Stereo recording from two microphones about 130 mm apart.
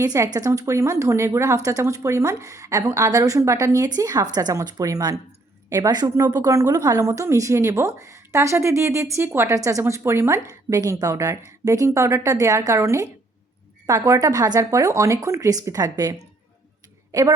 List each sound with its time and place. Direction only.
0.0 s a woman's voice: 25° right (ahead or behind)